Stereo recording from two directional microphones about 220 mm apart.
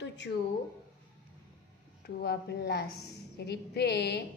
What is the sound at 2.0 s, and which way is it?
A woman's voice, 45° left (ahead or behind).